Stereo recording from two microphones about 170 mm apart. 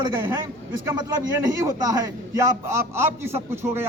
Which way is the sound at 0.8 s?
15° right (ahead or behind).